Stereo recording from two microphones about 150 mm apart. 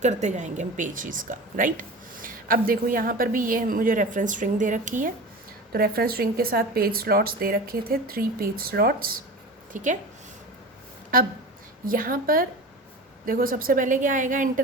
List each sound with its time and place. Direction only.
0.0 s a woman's voice: 50° right (ahead or behind)
5.7 s a woman's voice: 85° right
9.7 s a woman's voice: 55° right (ahead or behind)
11.1 s a woman's voice: 70° right (ahead or behind)